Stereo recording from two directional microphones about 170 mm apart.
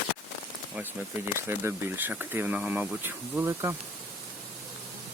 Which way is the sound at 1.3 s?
15° right (ahead or behind).